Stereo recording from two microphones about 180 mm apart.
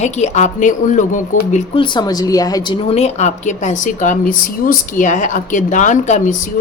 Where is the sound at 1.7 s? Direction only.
25° left (ahead or behind).